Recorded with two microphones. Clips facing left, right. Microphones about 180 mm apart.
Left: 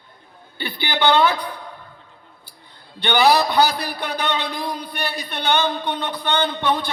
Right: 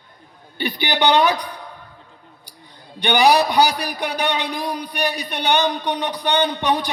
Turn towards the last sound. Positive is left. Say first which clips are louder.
# right 1 dB
turn(degrees=-15)  # may be behind; listen again after turning